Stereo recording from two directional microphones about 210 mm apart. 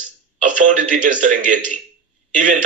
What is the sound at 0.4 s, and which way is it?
A man's voice, 35° right (ahead or behind).